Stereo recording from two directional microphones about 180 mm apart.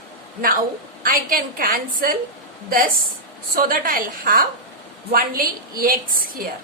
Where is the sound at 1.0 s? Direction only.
50° right (ahead or behind).